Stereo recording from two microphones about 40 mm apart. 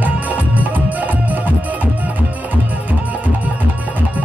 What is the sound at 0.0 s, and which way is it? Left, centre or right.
Music, right.